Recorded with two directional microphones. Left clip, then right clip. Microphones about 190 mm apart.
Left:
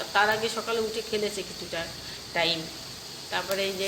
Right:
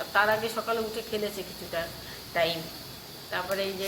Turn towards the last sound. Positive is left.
turn(degrees=15)  # may be behind; listen again after turning